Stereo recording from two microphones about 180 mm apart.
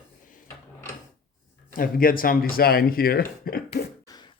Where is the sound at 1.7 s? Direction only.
50° left (ahead or behind).